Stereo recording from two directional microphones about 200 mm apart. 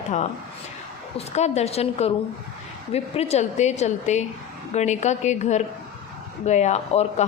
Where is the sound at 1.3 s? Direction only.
35° left (ahead or behind).